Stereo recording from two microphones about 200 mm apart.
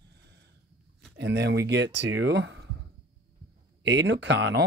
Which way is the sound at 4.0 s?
65° right (ahead or behind).